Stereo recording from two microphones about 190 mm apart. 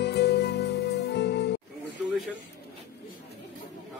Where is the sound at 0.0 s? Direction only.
60° left (ahead or behind).